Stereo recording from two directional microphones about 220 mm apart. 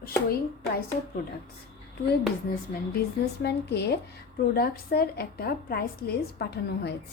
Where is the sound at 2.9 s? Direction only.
50° left (ahead or behind).